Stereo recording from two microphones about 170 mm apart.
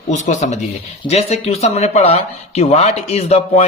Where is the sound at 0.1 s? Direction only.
45° left (ahead or behind).